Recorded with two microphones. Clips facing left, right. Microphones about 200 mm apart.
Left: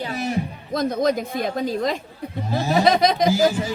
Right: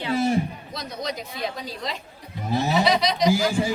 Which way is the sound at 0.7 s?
50° left (ahead or behind).